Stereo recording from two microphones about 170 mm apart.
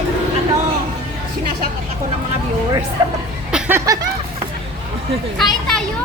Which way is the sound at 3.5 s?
15° right (ahead or behind).